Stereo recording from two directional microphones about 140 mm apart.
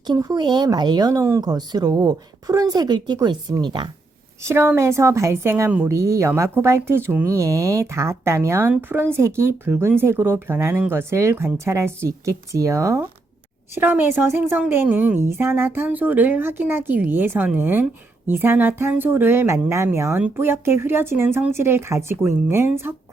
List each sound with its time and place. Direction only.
0.1 s a woman's voice: 30° right (ahead or behind)
4.4 s a woman's voice: 15° right (ahead or behind)